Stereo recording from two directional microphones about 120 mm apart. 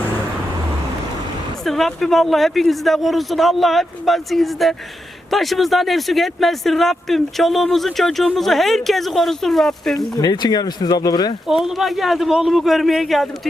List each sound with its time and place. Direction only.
1.6 s speech: centre (ahead or behind)
10.2 s speech: 35° left (ahead or behind)
11.4 s speech: 5° right (ahead or behind)